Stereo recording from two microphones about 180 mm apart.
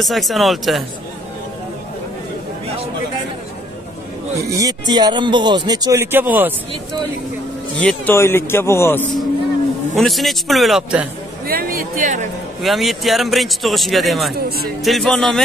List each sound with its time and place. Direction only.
0.0 s a man's voice: centre (ahead or behind)
4.4 s speech: 20° right (ahead or behind)
7.8 s speech: 10° left (ahead or behind)
9.9 s a man's voice: centre (ahead or behind)
11.4 s speech: 55° right (ahead or behind)
12.6 s a man's voice: centre (ahead or behind)